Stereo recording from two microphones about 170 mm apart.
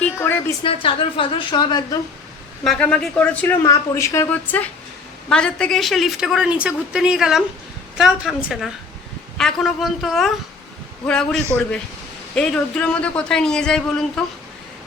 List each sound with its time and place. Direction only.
0.0 s a sound: 10° left (ahead or behind)
0.6 s a woman's voice: 30° left (ahead or behind)
2.6 s a woman's voice: 5° left (ahead or behind)
3.6 s a woman's voice: 20° left (ahead or behind); by 14.3 s 5° left (ahead or behind)